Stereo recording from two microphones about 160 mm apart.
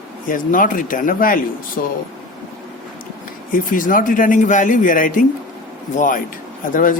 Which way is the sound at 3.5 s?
60° left (ahead or behind).